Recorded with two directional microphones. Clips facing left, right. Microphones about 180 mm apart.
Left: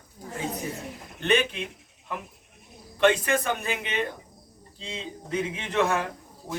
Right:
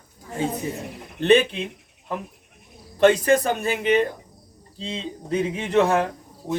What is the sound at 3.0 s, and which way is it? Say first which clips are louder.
A man's voice: right 5 dB; 40° right (ahead or behind).